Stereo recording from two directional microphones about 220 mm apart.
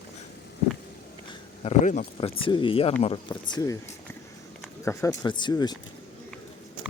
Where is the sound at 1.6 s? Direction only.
35° left (ahead or behind).